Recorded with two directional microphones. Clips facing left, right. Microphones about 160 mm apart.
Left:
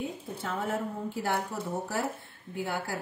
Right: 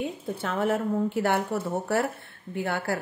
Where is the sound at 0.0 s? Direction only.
75° right (ahead or behind).